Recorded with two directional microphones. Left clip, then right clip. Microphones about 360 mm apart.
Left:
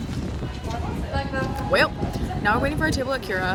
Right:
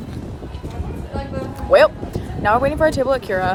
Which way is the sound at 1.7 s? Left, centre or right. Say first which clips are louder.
Right 9 dB; centre.